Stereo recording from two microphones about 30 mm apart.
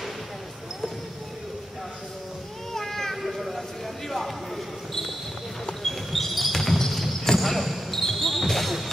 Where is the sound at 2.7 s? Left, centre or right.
Centre.